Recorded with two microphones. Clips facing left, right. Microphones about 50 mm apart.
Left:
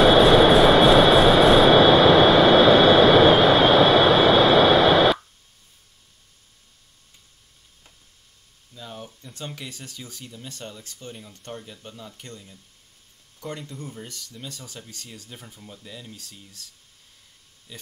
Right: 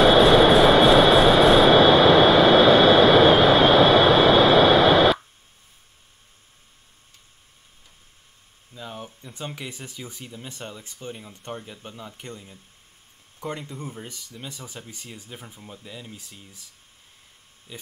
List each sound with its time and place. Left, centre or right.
0.0 s train: centre
8.7 s speech: centre
17.7 s speech: centre